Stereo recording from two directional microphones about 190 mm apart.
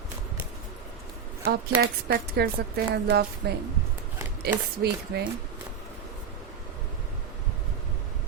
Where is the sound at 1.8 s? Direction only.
55° right (ahead or behind).